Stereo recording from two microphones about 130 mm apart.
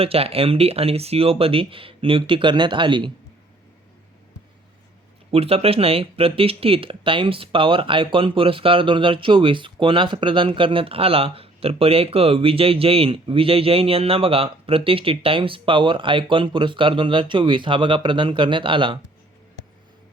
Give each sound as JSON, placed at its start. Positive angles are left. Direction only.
{"t": 0.0, "sound": "speech", "side_deg": -50}
{"t": 5.3, "sound": "speech", "side_deg": -50}